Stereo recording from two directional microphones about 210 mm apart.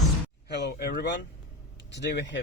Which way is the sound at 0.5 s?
50° left (ahead or behind).